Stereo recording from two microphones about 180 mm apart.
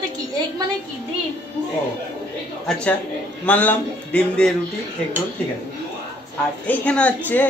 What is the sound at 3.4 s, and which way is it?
A woman's voice, 10° left (ahead or behind).